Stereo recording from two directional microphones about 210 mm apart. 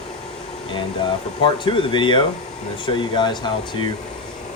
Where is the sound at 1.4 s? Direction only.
25° left (ahead or behind).